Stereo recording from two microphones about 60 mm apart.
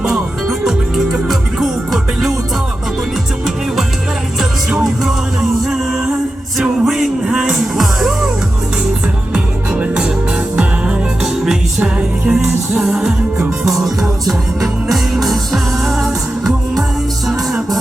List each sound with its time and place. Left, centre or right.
0.0 s music: centre
4.8 s music: centre
9.3 s music: centre
12.4 s music: centre